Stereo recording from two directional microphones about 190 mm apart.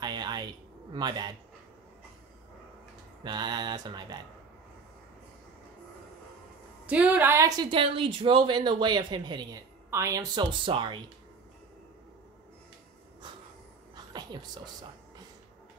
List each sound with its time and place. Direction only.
0.0 s a sound: 20° right (ahead or behind)
0.9 s a woman's voice: 20° right (ahead or behind)
3.3 s a woman's voice: 20° right (ahead or behind)
6.9 s a woman's voice: 10° right (ahead or behind); by 11.0 s 25° right (ahead or behind)
14.1 s a woman's voice: 20° right (ahead or behind)